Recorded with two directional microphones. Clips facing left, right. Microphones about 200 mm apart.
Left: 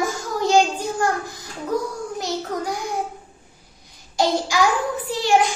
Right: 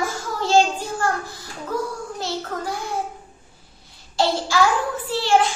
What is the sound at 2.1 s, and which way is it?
Child singing, 15° left (ahead or behind).